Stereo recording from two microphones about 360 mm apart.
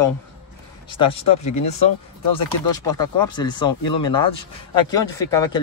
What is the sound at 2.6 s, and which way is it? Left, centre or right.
A man's voice, centre.